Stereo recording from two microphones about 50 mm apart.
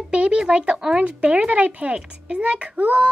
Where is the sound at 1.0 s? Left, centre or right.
Right.